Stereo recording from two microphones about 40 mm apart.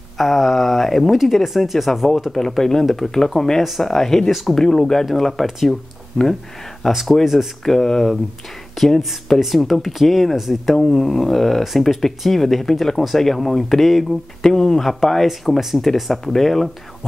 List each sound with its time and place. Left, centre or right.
0.2 s speech: centre
2.3 s speech: centre
6.8 s speech: centre
7.6 s speech: centre
14.4 s speech: centre